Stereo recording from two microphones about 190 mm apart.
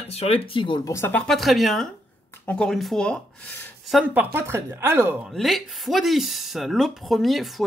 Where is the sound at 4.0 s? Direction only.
10° right (ahead or behind).